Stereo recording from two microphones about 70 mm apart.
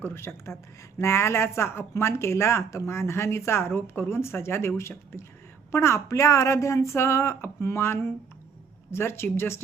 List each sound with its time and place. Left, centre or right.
0.0 s speech: left